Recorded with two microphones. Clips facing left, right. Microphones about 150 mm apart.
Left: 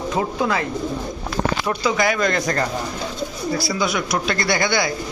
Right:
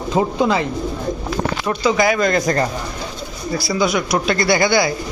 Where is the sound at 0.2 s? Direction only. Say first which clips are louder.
Right 5 dB; 25° right (ahead or behind).